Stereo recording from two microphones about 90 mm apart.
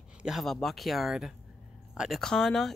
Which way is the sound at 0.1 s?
5° right (ahead or behind).